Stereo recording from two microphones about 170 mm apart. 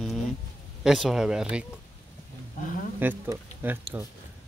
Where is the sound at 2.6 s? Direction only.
55° left (ahead or behind).